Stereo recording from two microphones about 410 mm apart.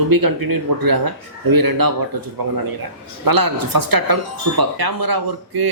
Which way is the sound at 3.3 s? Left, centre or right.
Right.